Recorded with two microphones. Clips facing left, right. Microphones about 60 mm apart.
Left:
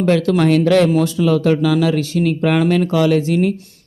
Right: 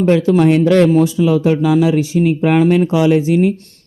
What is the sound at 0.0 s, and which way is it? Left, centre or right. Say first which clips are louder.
Speech: right 3 dB; centre.